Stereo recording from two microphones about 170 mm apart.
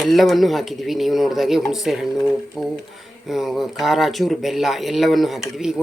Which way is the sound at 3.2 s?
Centre (ahead or behind).